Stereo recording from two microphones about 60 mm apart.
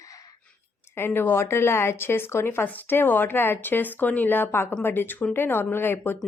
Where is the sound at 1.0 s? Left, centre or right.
Left.